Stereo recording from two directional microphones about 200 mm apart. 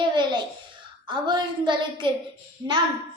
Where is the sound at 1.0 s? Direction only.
25° right (ahead or behind).